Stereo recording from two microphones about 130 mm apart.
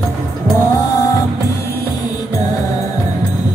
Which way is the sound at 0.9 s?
25° left (ahead or behind).